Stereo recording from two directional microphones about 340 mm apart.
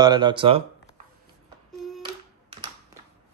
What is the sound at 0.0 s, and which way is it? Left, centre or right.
Speech, centre.